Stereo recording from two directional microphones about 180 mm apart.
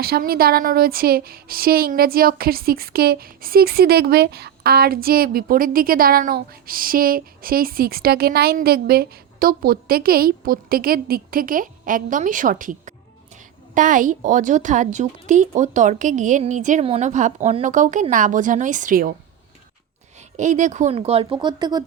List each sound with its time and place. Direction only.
0.0 s a woman's voice: 55° right (ahead or behind)
20.3 s speech: 40° right (ahead or behind); by 21.8 s 20° right (ahead or behind)